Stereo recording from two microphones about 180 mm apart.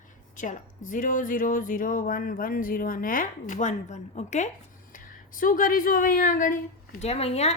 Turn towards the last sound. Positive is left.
turn(degrees=35)  # may be behind; listen again after turning